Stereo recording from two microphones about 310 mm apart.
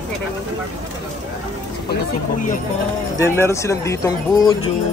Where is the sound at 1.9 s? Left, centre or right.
Left.